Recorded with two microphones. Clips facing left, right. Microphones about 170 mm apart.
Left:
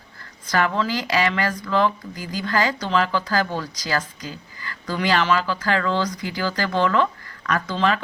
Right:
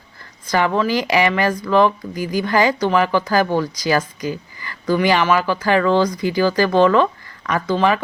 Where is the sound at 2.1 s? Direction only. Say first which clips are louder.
Right 9 dB; 65° right (ahead or behind).